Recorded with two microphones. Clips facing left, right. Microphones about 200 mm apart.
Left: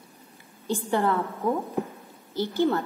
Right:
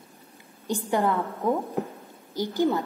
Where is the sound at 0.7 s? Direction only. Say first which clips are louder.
Even; 15° right (ahead or behind).